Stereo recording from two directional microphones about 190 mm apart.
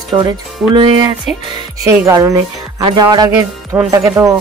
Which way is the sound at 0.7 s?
20° right (ahead or behind).